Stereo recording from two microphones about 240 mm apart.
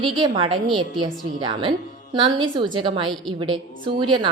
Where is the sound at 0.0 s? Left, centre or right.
Centre.